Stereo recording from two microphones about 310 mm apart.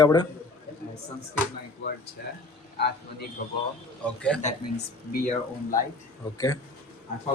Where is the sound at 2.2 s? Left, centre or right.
Left.